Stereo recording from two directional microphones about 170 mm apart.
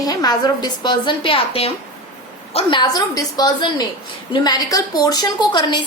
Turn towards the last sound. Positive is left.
turn(degrees=25)  # may be behind; listen again after turning